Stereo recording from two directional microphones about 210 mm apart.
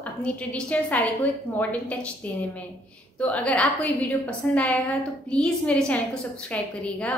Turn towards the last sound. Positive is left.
turn(degrees=5)  # may be behind; listen again after turning